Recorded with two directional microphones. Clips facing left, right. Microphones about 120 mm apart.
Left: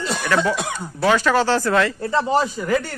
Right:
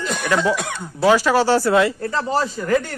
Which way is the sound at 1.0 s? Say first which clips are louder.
Right 2 dB; 15° right (ahead or behind).